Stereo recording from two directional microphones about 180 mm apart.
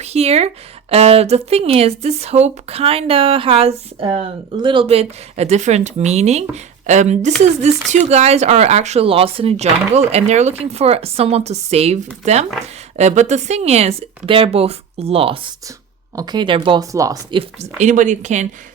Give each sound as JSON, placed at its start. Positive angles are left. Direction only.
{"t": 0.0, "sound": "speech", "side_deg": -35}
{"t": 17.3, "sound": "speech", "side_deg": -40}